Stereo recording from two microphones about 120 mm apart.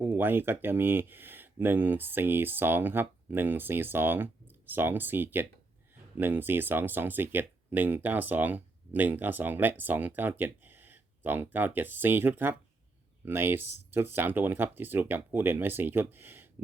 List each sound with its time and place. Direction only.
0.0 s speech: 15° right (ahead or behind)